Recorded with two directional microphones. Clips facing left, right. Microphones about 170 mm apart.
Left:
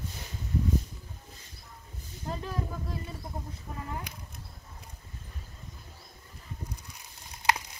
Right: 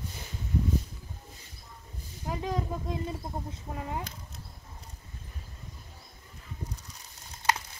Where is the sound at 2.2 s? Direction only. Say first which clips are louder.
Right 3 dB; 15° right (ahead or behind).